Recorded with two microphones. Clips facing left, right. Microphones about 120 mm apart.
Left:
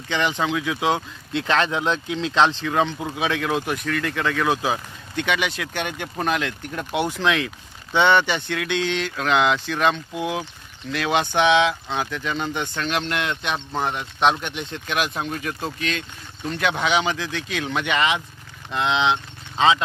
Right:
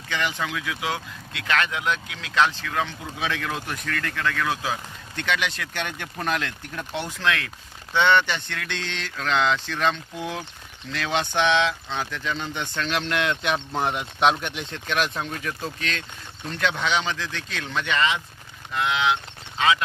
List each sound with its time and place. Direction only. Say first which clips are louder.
0.1 s speech: left 5 dB; 25° left (ahead or behind)